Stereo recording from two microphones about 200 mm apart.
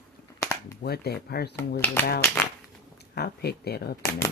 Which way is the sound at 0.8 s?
50° left (ahead or behind).